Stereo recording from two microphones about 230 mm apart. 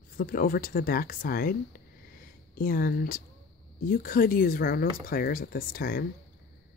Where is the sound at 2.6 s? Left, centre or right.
Left.